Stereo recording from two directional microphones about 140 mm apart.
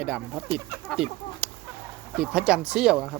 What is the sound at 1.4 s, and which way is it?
Chicken, 10° right (ahead or behind).